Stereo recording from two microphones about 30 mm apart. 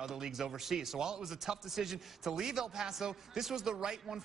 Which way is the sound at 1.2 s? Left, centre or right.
Centre.